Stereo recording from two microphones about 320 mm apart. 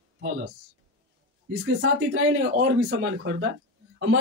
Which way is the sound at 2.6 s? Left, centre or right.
Right.